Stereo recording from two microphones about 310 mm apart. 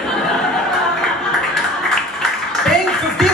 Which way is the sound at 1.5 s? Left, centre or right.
Centre.